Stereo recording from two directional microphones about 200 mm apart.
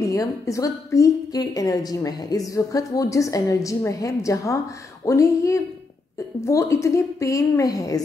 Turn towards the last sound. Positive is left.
turn(degrees=15)  # may be behind; listen again after turning